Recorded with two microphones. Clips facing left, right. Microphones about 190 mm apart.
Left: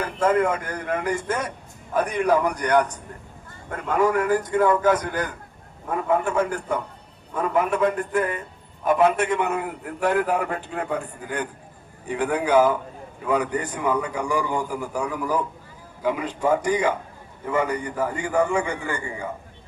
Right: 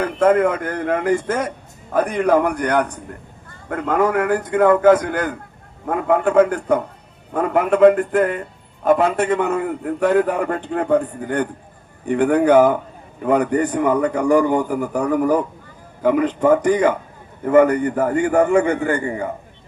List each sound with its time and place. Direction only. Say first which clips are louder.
0.0 s speech: right 5 dB; 55° right (ahead or behind)